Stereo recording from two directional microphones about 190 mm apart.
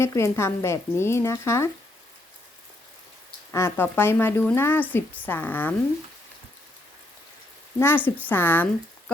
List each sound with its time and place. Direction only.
0.0 s speech: 15° left (ahead or behind)
3.5 s speech: 15° left (ahead or behind)
7.8 s speech: 10° left (ahead or behind)